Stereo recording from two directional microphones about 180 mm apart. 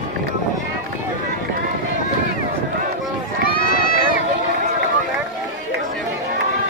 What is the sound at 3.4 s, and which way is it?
Run, 55° left (ahead or behind).